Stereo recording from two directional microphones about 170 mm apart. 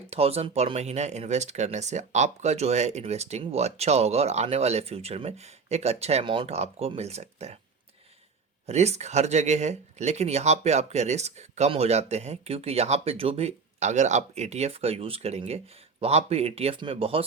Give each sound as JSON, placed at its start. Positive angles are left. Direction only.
{"t": 0.1, "sound": "speech", "side_deg": -35}
{"t": 8.6, "sound": "speech", "side_deg": -40}